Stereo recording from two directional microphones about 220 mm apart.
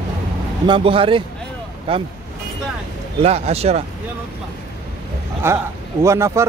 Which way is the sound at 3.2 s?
30° right (ahead or behind).